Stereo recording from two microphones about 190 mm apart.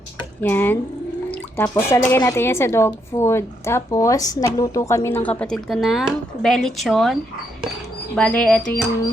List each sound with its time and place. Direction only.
0.4 s a woman's voice: 10° left (ahead or behind)
1.3 s drip: 10° left (ahead or behind)
1.9 s a woman's voice: 10° left (ahead or behind)